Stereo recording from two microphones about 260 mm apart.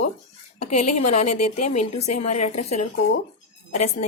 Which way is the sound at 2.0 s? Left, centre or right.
Left.